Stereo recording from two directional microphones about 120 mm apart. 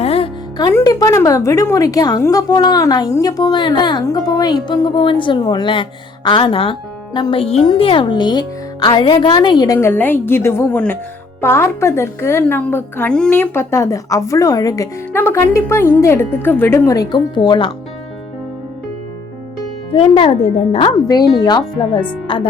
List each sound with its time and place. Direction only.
0.0 s music: 55° left (ahead or behind)
0.9 s a woman's voice: 30° left (ahead or behind)
9.7 s a woman's voice: 20° left (ahead or behind)
15.1 s a woman's voice: 20° left (ahead or behind); by 17.7 s 40° left (ahead or behind)
19.9 s speech: 50° left (ahead or behind)
20.9 s a woman's voice: 30° left (ahead or behind)